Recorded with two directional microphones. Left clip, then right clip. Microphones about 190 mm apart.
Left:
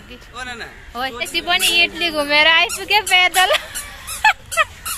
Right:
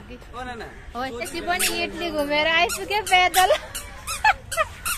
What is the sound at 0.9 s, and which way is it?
A woman's voice, 10° left (ahead or behind).